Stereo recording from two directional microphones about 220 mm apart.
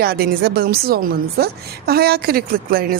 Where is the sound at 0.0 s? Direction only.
45° right (ahead or behind).